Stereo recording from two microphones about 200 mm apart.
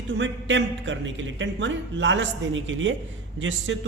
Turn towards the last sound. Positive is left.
turn(degrees=-70)  # may be behind; listen again after turning